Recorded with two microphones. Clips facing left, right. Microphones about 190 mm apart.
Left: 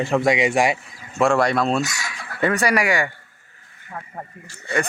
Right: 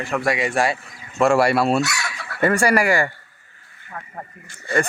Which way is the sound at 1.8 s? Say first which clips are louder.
Right 2 dB; 65° right (ahead or behind).